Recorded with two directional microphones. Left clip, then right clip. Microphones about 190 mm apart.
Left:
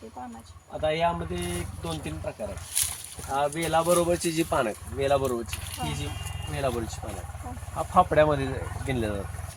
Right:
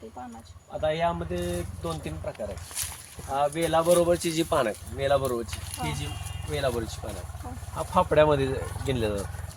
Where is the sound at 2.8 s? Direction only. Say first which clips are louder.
Left 6 dB; 15° left (ahead or behind).